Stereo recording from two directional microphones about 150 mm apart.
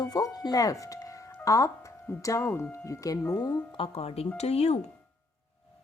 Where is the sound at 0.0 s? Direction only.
25° left (ahead or behind).